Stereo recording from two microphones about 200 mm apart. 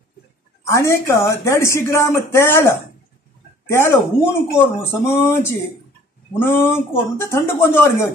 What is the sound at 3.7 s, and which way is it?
Speech, 15° left (ahead or behind).